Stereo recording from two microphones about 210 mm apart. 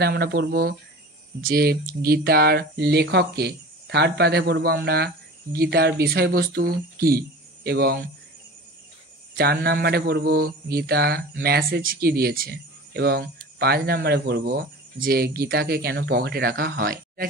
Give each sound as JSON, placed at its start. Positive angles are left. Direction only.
{"t": 0.0, "sound": "speech", "side_deg": -50}
{"t": 9.4, "sound": "speech", "side_deg": -50}